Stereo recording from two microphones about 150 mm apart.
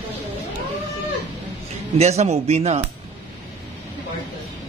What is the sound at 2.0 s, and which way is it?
Speech, 45° right (ahead or behind).